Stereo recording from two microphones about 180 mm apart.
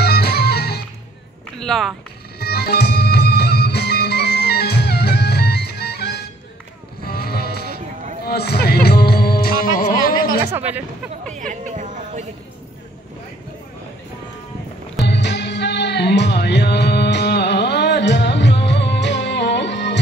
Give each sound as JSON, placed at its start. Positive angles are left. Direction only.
{"t": 0.0, "sound": "music", "side_deg": 60}
{"t": 1.6, "sound": "speech", "side_deg": 0}
{"t": 2.3, "sound": "music", "side_deg": 60}
{"t": 10.4, "sound": "a woman's voice", "side_deg": -10}
{"t": 11.3, "sound": "a sound", "side_deg": -45}
{"t": 15.0, "sound": "music", "side_deg": 75}